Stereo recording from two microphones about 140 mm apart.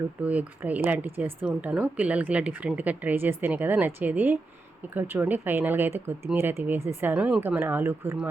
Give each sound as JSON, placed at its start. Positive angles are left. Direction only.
{"t": 0.2, "sound": "speech", "side_deg": -10}